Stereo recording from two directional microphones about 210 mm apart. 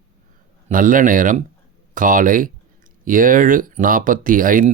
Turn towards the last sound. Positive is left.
turn(degrees=-40)  # may be behind; listen again after turning